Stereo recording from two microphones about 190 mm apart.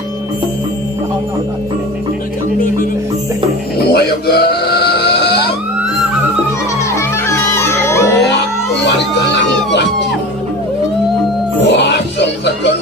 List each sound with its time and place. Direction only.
3.9 s music: 60° left (ahead or behind)
7.0 s music: 15° left (ahead or behind)
8.8 s music: 65° left (ahead or behind)
11.6 s music: 65° left (ahead or behind)